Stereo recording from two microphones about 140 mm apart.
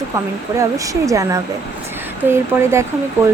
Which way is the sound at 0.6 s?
25° right (ahead or behind).